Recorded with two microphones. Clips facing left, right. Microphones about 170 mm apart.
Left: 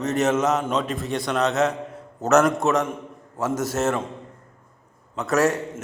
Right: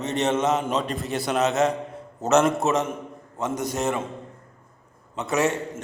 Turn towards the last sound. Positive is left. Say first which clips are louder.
# left 3 dB
turn(degrees=0)  # may be behind; listen again after turning